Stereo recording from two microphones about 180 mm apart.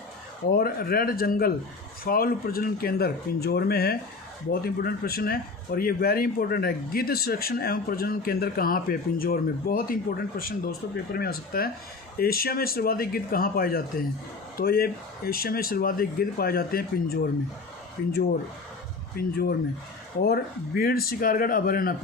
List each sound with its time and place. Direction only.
0.5 s speech: 55° left (ahead or behind)
19.1 s speech: 60° left (ahead or behind)